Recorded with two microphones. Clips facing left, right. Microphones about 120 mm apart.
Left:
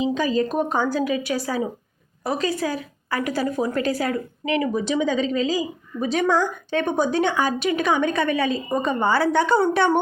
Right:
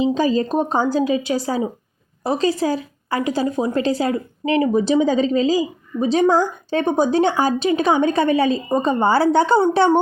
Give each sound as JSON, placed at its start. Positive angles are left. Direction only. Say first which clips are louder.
{"t": 0.0, "sound": "a woman's voice", "louder": "right 4 dB", "side_deg": -30}